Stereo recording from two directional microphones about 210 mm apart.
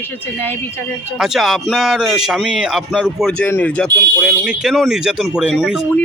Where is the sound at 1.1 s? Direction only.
Centre (ahead or behind).